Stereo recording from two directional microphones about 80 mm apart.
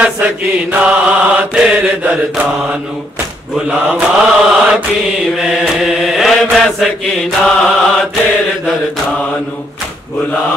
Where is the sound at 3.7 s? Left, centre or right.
Right.